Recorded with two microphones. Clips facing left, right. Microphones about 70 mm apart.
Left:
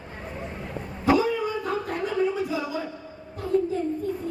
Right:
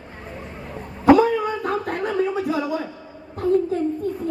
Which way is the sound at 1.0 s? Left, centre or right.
Right.